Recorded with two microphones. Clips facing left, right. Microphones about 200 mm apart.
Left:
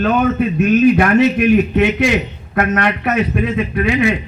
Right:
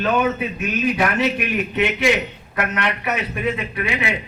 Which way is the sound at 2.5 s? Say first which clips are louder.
Left 7 dB; 55° left (ahead or behind).